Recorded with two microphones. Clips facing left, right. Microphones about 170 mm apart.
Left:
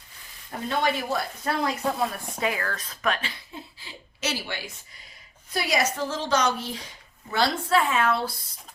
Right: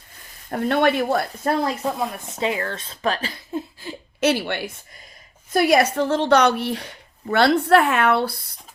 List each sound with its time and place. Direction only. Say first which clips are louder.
0.5 s a woman's voice: right 7 dB; 60° right (ahead or behind)
2.1 s a woman's voice: right 4 dB; 25° right (ahead or behind); by 8.4 s 65° right (ahead or behind)